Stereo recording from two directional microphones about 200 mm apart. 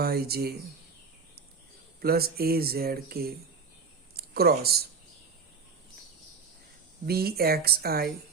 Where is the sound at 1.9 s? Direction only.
50° right (ahead or behind).